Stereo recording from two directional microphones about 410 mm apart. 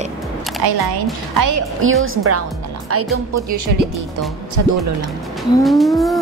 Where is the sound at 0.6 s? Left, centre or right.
Right.